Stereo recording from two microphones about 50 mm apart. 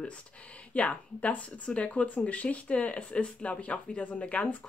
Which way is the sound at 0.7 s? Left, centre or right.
Left.